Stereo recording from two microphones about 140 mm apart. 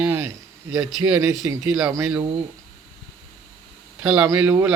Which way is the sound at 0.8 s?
10° right (ahead or behind).